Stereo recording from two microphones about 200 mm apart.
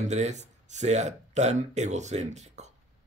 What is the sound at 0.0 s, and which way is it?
A man's voice, 35° right (ahead or behind).